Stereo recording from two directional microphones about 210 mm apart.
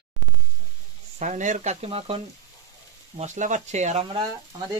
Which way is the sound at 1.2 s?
35° right (ahead or behind).